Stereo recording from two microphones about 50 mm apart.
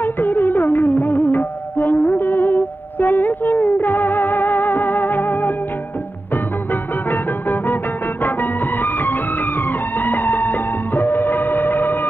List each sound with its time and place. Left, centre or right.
0.0 s music: left